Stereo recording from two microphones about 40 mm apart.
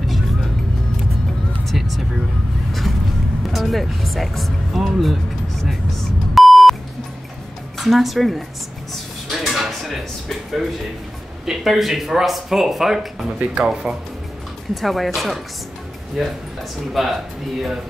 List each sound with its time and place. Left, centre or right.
1.7 s vehicle: centre
3.5 s speech: centre
5.7 s beep: centre
7.8 s speech: centre
9.3 s a sound: centre
11.4 s speech: centre
13.6 s speech: right
14.7 s speech: centre